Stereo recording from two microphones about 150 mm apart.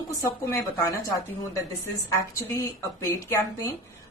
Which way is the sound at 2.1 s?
15° left (ahead or behind).